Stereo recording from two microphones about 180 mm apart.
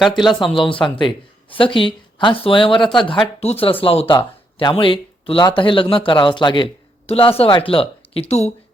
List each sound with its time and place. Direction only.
0.3 s speech: 30° left (ahead or behind)